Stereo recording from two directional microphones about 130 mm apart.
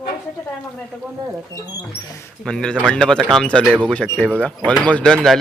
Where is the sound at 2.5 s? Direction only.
5° left (ahead or behind).